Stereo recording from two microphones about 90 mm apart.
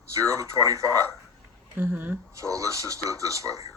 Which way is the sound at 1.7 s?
30° right (ahead or behind).